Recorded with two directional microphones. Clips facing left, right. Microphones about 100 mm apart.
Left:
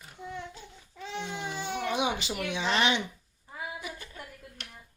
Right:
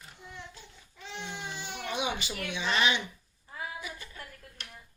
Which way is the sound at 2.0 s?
90° left.